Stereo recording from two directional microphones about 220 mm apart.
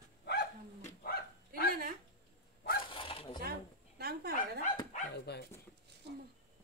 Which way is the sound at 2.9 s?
25° left (ahead or behind).